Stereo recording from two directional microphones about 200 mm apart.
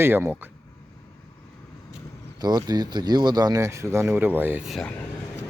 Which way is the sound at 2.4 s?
20° right (ahead or behind).